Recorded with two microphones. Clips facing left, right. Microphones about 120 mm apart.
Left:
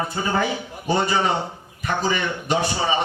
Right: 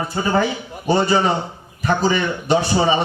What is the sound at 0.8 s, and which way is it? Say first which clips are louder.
A man's voice: right 4 dB; 35° right (ahead or behind).